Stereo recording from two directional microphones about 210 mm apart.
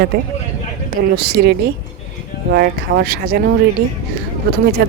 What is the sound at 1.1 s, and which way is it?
Speech, 50° right (ahead or behind).